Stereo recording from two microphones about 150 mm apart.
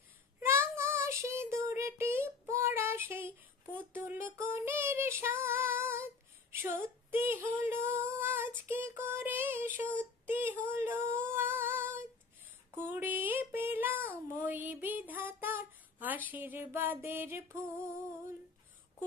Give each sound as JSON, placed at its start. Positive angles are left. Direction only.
{"t": 0.4, "sound": "child singing", "side_deg": -15}
{"t": 6.5, "sound": "female singing", "side_deg": -15}
{"t": 12.7, "sound": "a sound", "side_deg": -15}